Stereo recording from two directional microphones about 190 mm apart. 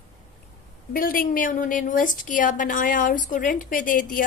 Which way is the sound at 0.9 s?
50° left (ahead or behind).